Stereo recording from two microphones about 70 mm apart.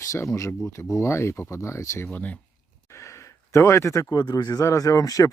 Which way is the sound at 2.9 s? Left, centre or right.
Left.